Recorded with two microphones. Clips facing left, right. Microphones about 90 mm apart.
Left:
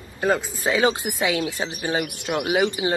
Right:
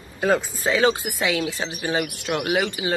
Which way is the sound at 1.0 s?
15° left (ahead or behind).